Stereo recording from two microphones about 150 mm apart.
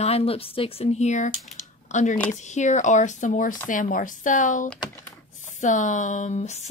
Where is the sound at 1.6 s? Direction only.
55° left (ahead or behind).